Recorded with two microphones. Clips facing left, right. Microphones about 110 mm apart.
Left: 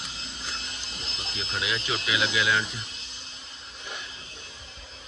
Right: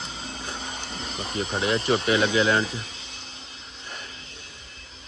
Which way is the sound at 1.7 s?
55° right (ahead or behind).